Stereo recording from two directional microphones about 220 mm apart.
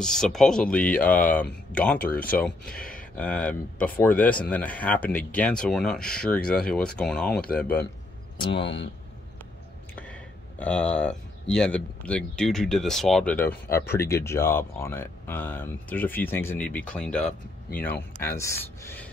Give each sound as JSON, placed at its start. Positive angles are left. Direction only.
{"t": 0.0, "sound": "speech", "side_deg": 0}
{"t": 8.4, "sound": "speech", "side_deg": 25}
{"t": 8.6, "sound": "speech", "side_deg": 55}
{"t": 9.9, "sound": "speech", "side_deg": 5}